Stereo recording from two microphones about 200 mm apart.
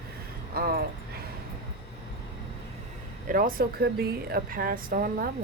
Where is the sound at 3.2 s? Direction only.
45° right (ahead or behind).